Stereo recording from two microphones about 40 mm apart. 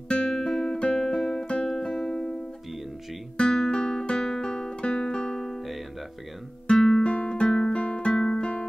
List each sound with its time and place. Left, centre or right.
0.1 s guitar: left
1.7 s music: centre
3.3 s music: centre
6.8 s music: centre